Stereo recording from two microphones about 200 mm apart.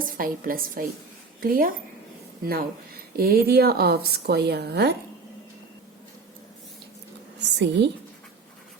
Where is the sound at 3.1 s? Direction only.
50° right (ahead or behind).